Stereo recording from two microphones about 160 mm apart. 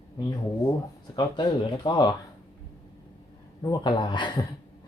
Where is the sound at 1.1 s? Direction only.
30° left (ahead or behind).